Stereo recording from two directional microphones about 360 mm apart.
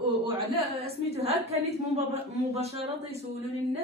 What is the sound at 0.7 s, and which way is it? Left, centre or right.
A woman's voice, centre.